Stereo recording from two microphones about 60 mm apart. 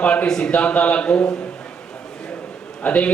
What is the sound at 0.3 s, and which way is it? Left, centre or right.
Speech, centre.